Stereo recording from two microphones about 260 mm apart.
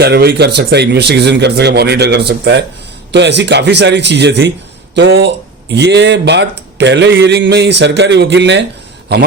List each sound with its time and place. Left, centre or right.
0.0 s speech: right